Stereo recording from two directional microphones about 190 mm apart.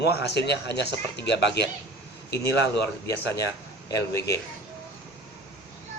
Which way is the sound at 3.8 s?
15° left (ahead or behind).